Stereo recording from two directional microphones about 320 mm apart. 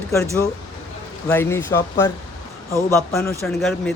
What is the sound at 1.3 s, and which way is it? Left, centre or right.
Speech, centre.